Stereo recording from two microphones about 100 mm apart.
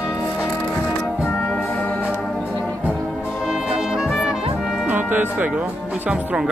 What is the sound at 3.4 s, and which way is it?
Music, 5° right (ahead or behind).